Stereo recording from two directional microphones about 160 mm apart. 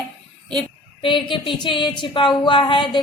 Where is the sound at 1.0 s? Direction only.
30° left (ahead or behind).